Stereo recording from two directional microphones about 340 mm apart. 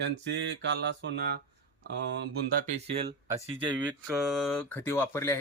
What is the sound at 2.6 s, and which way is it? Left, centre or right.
Speech, centre.